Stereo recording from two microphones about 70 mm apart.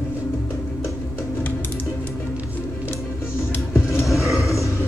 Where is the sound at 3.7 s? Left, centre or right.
Left.